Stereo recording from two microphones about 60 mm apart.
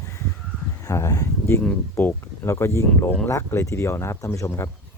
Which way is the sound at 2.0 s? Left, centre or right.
Left.